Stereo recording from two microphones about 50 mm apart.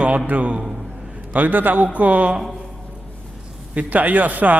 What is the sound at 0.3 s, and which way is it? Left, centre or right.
A man's voice, right.